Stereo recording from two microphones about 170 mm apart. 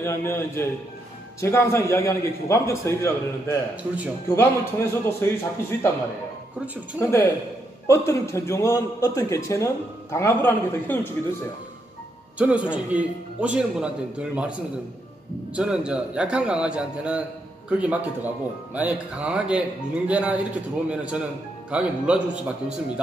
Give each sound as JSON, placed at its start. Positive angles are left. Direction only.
{"t": 0.0, "sound": "a man's voice", "side_deg": 15}
{"t": 7.0, "sound": "a man's voice", "side_deg": 15}
{"t": 12.4, "sound": "a man's voice", "side_deg": -5}